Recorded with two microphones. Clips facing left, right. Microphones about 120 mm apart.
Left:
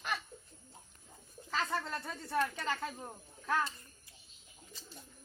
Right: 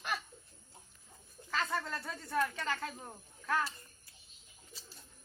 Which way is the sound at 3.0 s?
5° left (ahead or behind).